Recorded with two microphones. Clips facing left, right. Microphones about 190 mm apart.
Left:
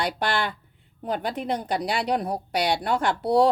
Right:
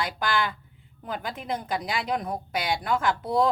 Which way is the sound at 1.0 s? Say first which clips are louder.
Left 6 dB; 35° left (ahead or behind).